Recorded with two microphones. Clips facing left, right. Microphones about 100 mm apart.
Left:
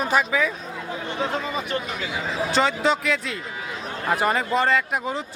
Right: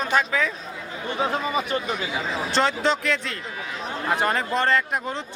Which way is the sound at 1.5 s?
15° right (ahead or behind).